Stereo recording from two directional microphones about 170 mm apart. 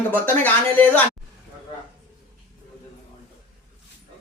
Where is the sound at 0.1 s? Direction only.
10° left (ahead or behind).